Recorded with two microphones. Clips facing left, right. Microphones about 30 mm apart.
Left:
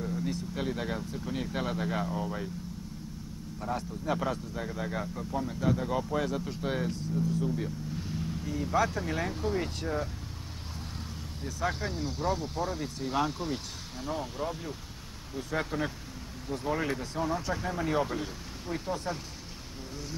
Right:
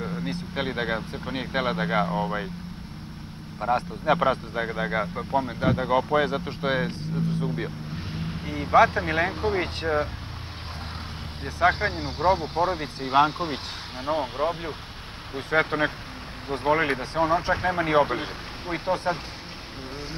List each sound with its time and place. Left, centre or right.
0.0 s speech: right
3.6 s speech: right
11.4 s speech: right